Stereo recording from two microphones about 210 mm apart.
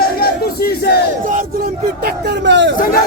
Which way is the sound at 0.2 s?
45° left (ahead or behind).